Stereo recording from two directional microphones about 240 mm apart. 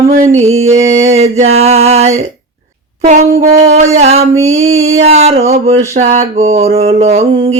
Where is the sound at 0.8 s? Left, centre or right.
Right.